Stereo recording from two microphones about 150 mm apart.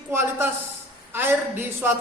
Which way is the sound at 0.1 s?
15° right (ahead or behind).